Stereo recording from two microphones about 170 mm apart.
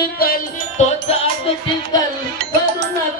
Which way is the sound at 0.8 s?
40° left (ahead or behind).